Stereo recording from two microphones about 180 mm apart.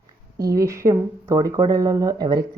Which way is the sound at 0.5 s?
15° right (ahead or behind).